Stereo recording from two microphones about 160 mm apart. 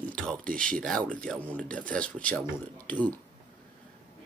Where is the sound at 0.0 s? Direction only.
5° left (ahead or behind).